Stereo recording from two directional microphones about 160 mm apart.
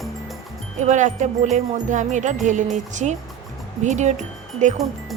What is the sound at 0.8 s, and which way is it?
Speech, 50° right (ahead or behind).